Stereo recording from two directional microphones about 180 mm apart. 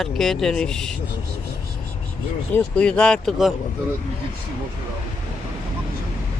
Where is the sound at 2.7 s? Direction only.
5° left (ahead or behind).